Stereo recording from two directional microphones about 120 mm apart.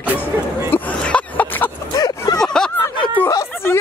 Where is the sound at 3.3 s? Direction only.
25° left (ahead or behind).